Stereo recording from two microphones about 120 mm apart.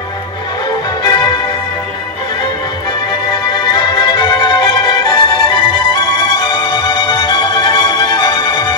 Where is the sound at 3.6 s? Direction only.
40° left (ahead or behind).